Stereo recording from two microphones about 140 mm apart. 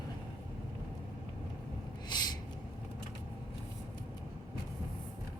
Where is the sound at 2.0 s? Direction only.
30° left (ahead or behind).